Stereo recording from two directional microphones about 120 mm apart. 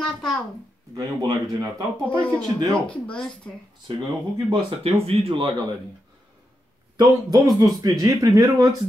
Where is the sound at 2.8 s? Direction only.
10° left (ahead or behind).